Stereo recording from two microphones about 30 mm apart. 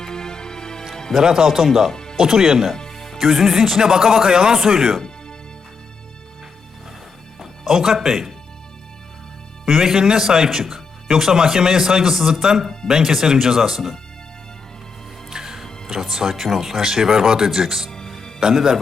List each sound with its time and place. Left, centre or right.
0.0 s music: centre
1.2 s speech: right
1.6 s speech: centre
1.9 s music: left
2.1 s speech: centre
2.9 s music: centre
3.2 s speech: centre
7.3 s music: centre
7.8 s speech: centre
9.6 s speech: centre
11.2 s speech: right
15.3 s music: centre
15.9 s speech: centre